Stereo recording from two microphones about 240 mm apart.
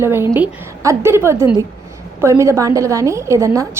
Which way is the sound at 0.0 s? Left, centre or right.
Centre.